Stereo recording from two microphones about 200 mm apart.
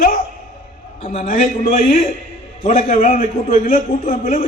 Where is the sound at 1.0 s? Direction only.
30° left (ahead or behind).